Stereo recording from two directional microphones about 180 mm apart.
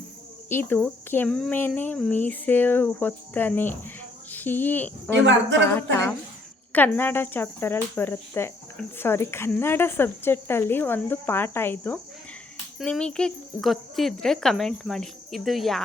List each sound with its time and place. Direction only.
0.4 s speech: 10° left (ahead or behind)
5.1 s a woman's voice: 90° right
5.6 s speech: 10° left (ahead or behind)